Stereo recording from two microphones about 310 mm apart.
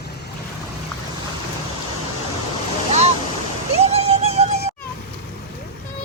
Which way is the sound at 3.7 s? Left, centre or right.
Centre.